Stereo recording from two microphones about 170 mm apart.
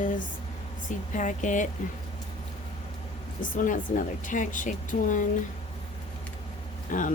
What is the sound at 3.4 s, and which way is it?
Speech, 50° left (ahead or behind).